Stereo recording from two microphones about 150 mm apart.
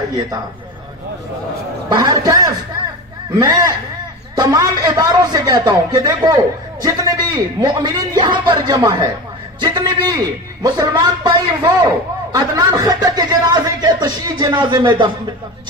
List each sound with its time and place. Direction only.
1.9 s a man's voice: 25° right (ahead or behind)